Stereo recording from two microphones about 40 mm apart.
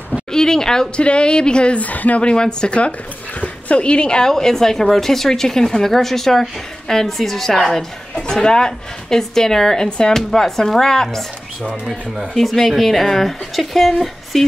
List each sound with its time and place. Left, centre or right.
0.3 s a sound: centre
0.9 s speech: left
1.8 s a woman's voice: left
2.2 s speech: left
3.3 s dog: left
3.8 s speech: left
4.3 s speech: centre
8.1 s speech: centre
9.8 s speech: left
10.1 s speech: centre
12.4 s speech: centre